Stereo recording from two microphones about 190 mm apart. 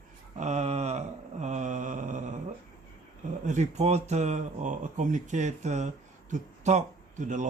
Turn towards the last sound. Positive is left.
turn(degrees=-40)  # may be behind; listen again after turning